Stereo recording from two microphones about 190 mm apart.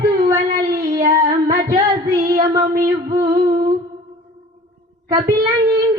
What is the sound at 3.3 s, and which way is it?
Humming, 20° right (ahead or behind).